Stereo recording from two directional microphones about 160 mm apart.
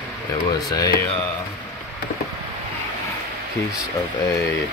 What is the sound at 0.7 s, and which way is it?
Speech, 25° left (ahead or behind).